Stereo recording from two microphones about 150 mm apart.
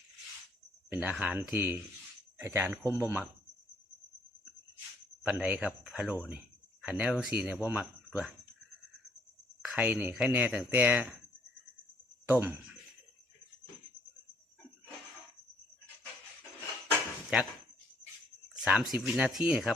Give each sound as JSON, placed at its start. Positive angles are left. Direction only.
{"t": 0.9, "sound": "speech", "side_deg": -10}
{"t": 5.2, "sound": "speech", "side_deg": -5}
{"t": 9.6, "sound": "speech", "side_deg": -5}
{"t": 12.2, "sound": "speech", "side_deg": -10}
{"t": 18.6, "sound": "speech", "side_deg": -5}